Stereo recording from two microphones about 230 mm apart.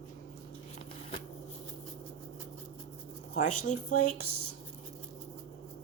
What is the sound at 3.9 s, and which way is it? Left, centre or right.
Speech, left.